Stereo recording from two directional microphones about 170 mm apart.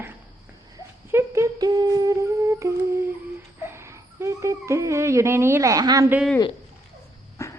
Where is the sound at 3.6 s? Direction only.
15° right (ahead or behind).